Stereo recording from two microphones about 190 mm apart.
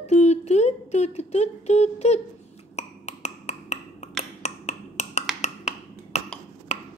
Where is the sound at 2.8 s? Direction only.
35° left (ahead or behind).